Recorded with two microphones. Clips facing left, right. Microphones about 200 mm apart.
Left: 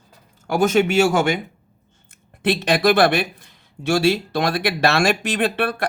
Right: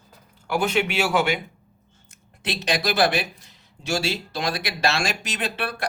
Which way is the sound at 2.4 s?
55° left (ahead or behind).